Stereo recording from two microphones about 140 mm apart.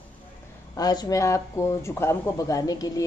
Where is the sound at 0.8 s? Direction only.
30° left (ahead or behind).